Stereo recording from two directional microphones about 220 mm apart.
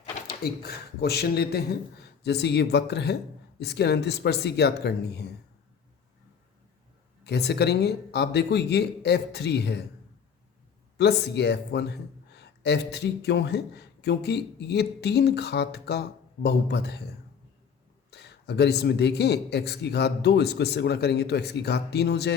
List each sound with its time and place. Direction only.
0.3 s a man's voice: 45° left (ahead or behind)
7.3 s a man's voice: 50° left (ahead or behind)
10.9 s a man's voice: 50° left (ahead or behind)
18.1 s a man's voice: 50° left (ahead or behind)